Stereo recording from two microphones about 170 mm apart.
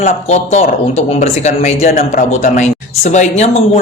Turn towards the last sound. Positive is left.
turn(degrees=40)  # may be behind; listen again after turning